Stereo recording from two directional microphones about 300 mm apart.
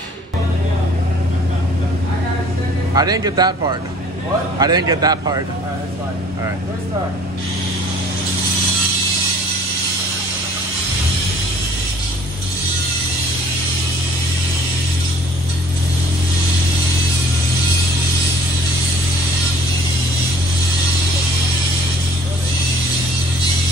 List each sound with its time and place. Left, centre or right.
2.9 s a man's voice: centre
4.6 s a man's voice: centre